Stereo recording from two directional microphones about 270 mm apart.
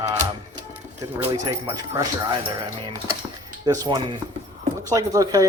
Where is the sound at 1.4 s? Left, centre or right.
Centre.